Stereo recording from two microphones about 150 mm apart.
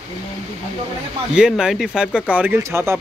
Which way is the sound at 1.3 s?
5° right (ahead or behind).